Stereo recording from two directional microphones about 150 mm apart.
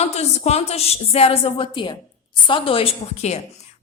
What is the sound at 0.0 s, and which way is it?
A woman's voice, 45° left (ahead or behind).